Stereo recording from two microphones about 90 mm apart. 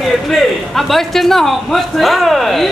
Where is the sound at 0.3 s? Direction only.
Centre (ahead or behind).